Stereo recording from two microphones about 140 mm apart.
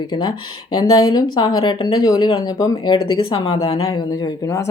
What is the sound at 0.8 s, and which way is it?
Speech, 25° left (ahead or behind).